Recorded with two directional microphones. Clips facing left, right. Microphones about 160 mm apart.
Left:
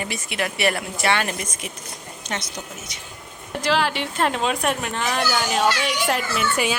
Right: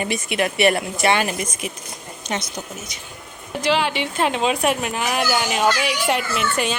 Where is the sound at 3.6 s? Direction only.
Centre (ahead or behind).